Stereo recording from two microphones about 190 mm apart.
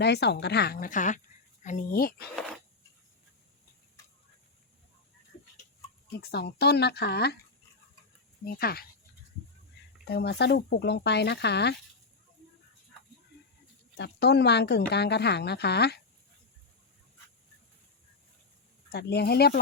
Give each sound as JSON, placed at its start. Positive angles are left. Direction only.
{"t": 0.0, "sound": "speech", "side_deg": 60}
{"t": 6.1, "sound": "speech", "side_deg": 55}
{"t": 8.4, "sound": "speech", "side_deg": 55}
{"t": 10.1, "sound": "speech", "side_deg": 60}
{"t": 13.9, "sound": "speech", "side_deg": 60}
{"t": 18.9, "sound": "speech", "side_deg": 60}